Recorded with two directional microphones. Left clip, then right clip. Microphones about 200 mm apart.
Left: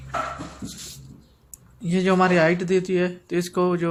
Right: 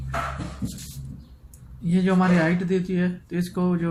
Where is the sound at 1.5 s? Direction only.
45° left (ahead or behind).